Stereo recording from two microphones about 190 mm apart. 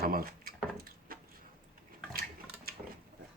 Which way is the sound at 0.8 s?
50° right (ahead or behind).